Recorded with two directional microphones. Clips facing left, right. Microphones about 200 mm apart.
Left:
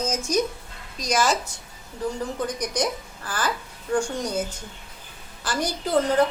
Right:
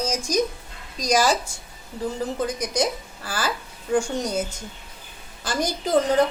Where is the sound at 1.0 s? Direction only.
35° right (ahead or behind).